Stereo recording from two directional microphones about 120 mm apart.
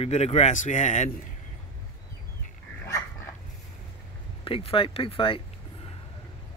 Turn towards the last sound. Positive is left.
turn(degrees=50)  # may be behind; listen again after turning